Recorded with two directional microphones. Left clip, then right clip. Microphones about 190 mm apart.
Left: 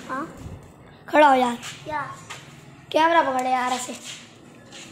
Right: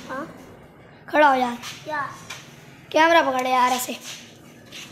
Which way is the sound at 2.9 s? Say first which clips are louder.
Right 2 dB; 30° right (ahead or behind).